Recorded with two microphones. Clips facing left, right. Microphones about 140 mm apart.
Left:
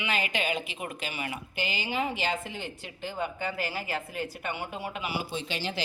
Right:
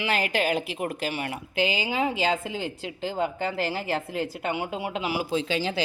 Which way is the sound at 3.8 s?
75° right (ahead or behind).